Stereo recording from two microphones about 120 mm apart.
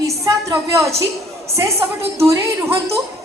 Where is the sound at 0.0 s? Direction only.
25° right (ahead or behind).